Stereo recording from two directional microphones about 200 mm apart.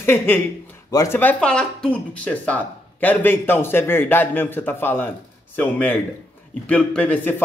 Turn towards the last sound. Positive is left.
turn(degrees=10)  # may be behind; listen again after turning